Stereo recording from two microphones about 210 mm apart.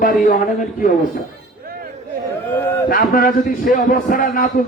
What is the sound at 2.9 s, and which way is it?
A man's voice, 40° left (ahead or behind).